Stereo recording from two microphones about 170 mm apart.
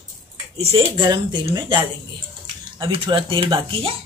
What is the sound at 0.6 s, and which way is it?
Speech, 35° right (ahead or behind).